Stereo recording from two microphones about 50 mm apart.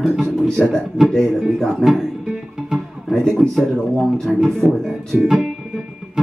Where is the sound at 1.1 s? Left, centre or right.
Centre.